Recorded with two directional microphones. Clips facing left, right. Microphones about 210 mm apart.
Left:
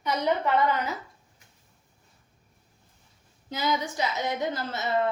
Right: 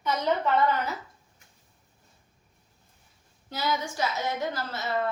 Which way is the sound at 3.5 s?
20° left (ahead or behind).